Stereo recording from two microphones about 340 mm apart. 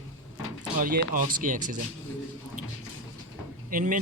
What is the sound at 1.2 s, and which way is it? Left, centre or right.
Speech, right.